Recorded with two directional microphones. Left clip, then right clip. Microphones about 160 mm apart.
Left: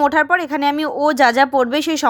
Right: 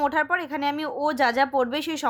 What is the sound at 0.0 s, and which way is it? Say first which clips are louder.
Speech: left 8 dB; 35° left (ahead or behind).